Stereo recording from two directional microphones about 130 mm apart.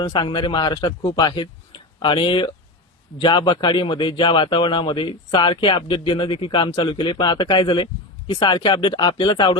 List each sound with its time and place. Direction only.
0.0 s a man's voice: 40° left (ahead or behind)